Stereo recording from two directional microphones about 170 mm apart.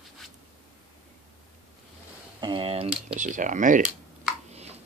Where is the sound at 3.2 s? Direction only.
50° right (ahead or behind).